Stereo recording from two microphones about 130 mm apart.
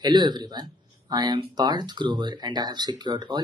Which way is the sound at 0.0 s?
35° right (ahead or behind).